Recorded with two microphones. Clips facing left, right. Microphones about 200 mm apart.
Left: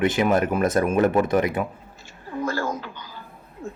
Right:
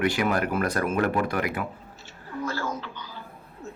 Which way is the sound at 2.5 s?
50° left (ahead or behind).